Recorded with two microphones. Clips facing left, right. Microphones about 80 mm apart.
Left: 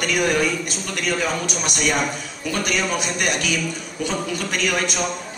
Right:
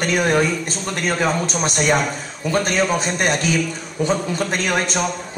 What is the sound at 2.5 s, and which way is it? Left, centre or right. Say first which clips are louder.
Speech: right 5 dB; right.